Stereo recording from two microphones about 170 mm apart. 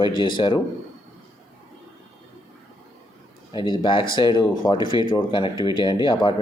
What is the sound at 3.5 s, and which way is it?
Speech, 25° left (ahead or behind).